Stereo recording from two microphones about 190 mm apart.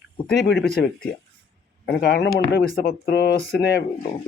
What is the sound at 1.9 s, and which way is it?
Speech, 60° left (ahead or behind).